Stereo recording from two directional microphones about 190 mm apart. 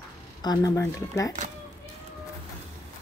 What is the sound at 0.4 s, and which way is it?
Speech, 20° left (ahead or behind).